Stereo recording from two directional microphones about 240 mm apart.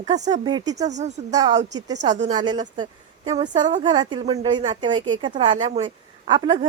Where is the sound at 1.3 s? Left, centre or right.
Centre.